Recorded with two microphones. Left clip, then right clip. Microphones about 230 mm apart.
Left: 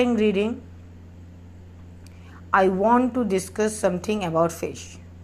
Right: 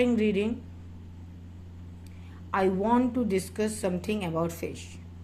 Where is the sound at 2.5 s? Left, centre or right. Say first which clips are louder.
Left 7 dB; centre.